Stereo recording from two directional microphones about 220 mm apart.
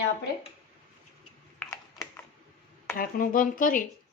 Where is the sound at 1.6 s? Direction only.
10° left (ahead or behind).